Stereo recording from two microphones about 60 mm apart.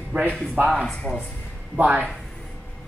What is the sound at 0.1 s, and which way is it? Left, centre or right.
Speech, right.